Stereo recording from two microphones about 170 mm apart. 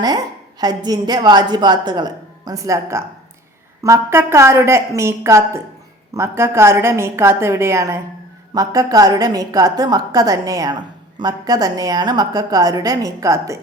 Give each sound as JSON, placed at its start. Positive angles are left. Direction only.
{"t": 0.6, "sound": "a woman's voice", "side_deg": -25}